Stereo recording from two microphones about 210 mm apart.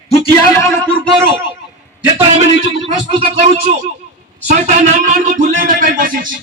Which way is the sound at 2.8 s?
25° right (ahead or behind).